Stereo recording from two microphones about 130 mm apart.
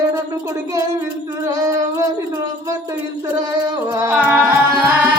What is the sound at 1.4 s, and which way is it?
Music, 25° right (ahead or behind).